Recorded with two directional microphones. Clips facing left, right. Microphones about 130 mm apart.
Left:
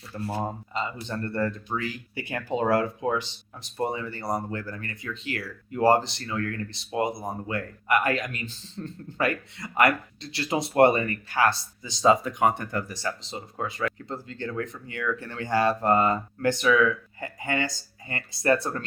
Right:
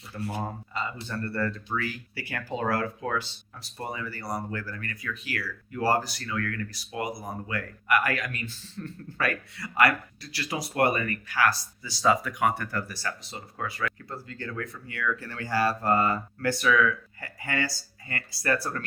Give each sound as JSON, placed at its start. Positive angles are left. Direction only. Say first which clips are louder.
{"t": 0.4, "sound": "speech", "louder": "left 3 dB", "side_deg": 20}